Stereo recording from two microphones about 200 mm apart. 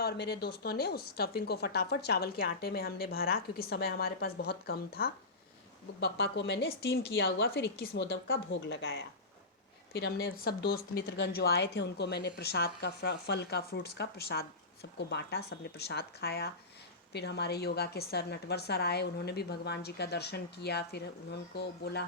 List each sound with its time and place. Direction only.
0.0 s speech: 55° left (ahead or behind)